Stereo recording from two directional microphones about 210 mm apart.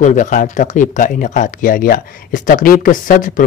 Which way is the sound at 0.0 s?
35° left (ahead or behind).